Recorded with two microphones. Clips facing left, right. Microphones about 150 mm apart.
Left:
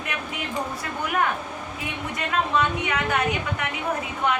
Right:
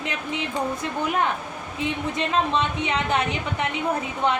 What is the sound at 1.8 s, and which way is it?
A woman's voice, 25° right (ahead or behind).